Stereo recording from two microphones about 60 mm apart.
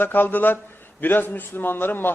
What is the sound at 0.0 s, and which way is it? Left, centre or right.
A man's voice, left.